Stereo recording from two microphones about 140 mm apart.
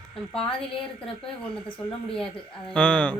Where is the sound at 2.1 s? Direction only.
5° left (ahead or behind).